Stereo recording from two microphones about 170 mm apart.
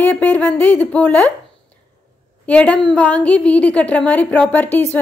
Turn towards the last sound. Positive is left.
turn(degrees=10)  # may be behind; listen again after turning